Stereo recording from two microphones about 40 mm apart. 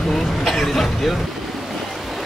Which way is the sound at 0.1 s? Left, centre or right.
Centre.